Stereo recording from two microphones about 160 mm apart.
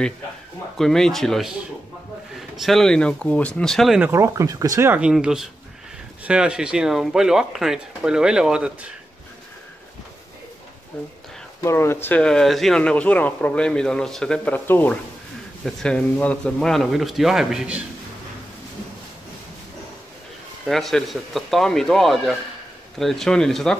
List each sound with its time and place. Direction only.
0.7 s speech: 5° left (ahead or behind)
4.1 s speech: 20° right (ahead or behind)
11.6 s speech: 15° left (ahead or behind); by 17.8 s 5° right (ahead or behind)
20.6 s speech: centre (ahead or behind)